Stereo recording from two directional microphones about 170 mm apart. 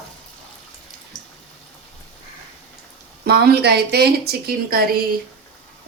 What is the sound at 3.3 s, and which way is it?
A woman's voice, 70° right (ahead or behind).